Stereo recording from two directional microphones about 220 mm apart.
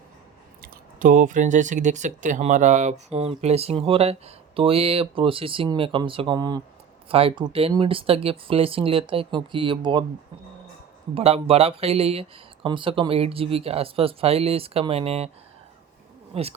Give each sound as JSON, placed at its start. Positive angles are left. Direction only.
{"t": 0.6, "sound": "speech", "side_deg": -40}
{"t": 11.1, "sound": "speech", "side_deg": -25}
{"t": 16.3, "sound": "speech", "side_deg": -25}